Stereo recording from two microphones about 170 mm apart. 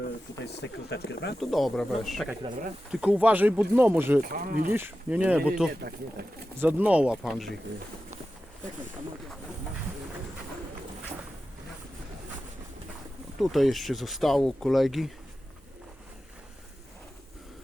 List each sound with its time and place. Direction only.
0.0 s speech: 80° left
1.4 s speech: centre (ahead or behind)
2.4 s speech: 30° right (ahead or behind)
2.9 s speech: 5° right (ahead or behind)
4.3 s speech: 60° right (ahead or behind)
4.7 s speech: 10° right (ahead or behind)
13.4 s speech: centre (ahead or behind)